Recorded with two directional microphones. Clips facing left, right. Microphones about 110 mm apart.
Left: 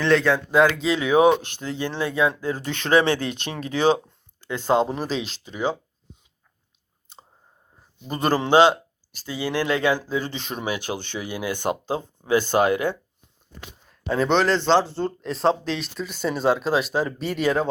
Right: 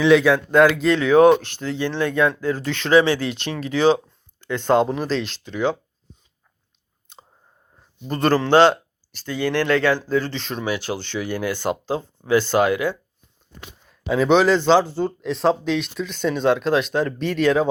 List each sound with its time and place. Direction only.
0.0 s speech: 5° right (ahead or behind)
0.9 s speech: 15° left (ahead or behind)
1.7 s speech: 45° left (ahead or behind)
2.0 s speech: 10° left (ahead or behind)
2.9 s speech: 55° left (ahead or behind)
3.7 s speech: 20° left (ahead or behind)
4.6 s speech: 5° left (ahead or behind)
7.1 s chewing: centre (ahead or behind)
8.0 s speech: 10° left (ahead or behind)
12.5 s speech: 40° left (ahead or behind)
14.1 s speech: 5° right (ahead or behind)